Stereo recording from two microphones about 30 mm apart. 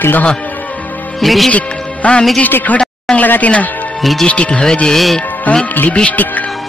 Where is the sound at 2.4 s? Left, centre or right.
Left.